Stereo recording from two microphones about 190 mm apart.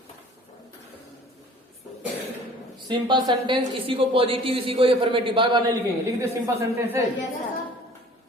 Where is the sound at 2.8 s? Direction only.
25° right (ahead or behind).